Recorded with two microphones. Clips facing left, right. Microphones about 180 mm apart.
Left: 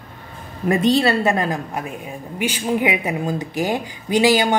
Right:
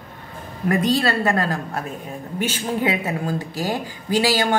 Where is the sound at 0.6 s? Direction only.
25° left (ahead or behind).